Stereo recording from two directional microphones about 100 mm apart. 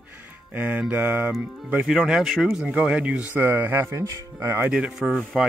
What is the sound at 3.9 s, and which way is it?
Speech, 30° right (ahead or behind).